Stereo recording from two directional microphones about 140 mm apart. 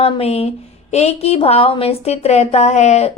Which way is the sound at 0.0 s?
45° left (ahead or behind).